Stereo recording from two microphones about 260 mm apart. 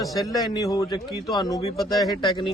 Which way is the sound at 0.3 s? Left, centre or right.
Centre.